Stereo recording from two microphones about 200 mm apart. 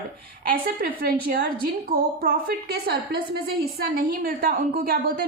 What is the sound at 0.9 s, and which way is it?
A woman's voice, 45° right (ahead or behind).